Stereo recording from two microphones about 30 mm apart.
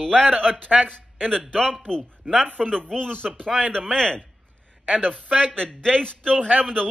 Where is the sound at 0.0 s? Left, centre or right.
Left.